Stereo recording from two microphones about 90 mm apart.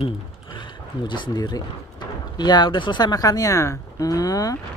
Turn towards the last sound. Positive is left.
turn(degrees=40)  # may be behind; listen again after turning